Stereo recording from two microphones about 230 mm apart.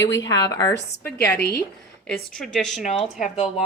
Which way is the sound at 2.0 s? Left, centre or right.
Centre.